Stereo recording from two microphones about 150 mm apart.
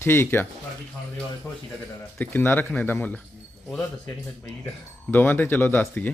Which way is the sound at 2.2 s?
10° left (ahead or behind).